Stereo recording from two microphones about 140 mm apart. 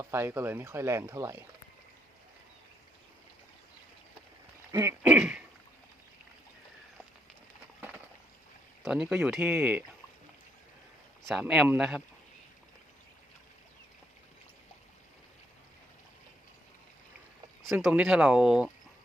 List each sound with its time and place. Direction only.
0.0 s speech: 20° right (ahead or behind)
4.7 s speech: 20° right (ahead or behind)
5.1 s speech: 5° right (ahead or behind)
8.8 s speech: 5° right (ahead or behind)
11.3 s speech: 5° right (ahead or behind)
17.6 s speech: centre (ahead or behind)